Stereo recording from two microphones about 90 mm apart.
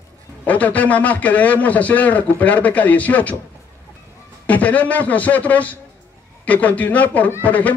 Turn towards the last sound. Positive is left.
turn(degrees=15)  # may be behind; listen again after turning